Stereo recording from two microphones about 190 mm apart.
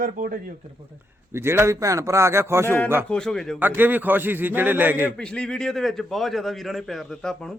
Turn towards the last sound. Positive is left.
turn(degrees=5)  # may be behind; listen again after turning